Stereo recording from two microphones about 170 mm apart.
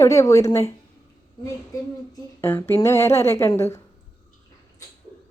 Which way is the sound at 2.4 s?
15° left (ahead or behind).